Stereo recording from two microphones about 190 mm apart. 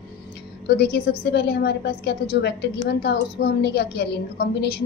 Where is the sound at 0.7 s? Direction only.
60° left (ahead or behind).